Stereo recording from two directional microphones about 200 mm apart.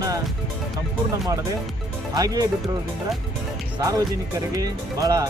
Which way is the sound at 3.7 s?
20° right (ahead or behind).